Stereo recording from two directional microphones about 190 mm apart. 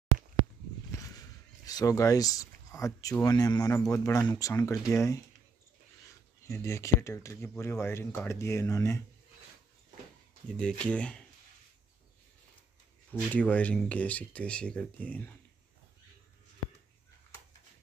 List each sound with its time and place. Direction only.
0.9 s a sound: 20° left (ahead or behind)
1.7 s speech: 20° left (ahead or behind)
6.4 s speech: 15° left (ahead or behind)
10.6 s speech: 5° left (ahead or behind)
13.1 s speech: 10° left (ahead or behind)